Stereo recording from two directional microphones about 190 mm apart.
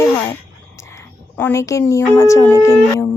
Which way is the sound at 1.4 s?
15° left (ahead or behind).